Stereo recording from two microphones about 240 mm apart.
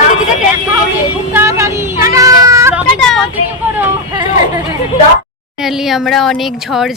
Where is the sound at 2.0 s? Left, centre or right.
Centre.